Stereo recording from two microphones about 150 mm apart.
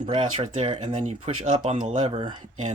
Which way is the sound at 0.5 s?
45° right (ahead or behind).